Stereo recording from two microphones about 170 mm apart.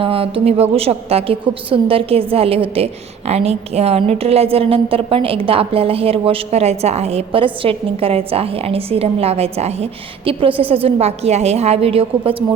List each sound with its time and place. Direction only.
0.0 s a woman's voice: 30° right (ahead or behind)